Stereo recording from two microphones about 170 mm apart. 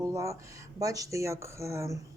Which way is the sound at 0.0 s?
20° right (ahead or behind).